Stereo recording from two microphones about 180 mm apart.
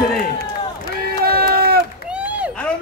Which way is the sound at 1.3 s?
60° right (ahead or behind).